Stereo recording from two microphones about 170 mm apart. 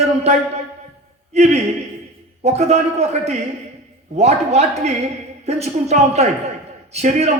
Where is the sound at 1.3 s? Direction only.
40° right (ahead or behind).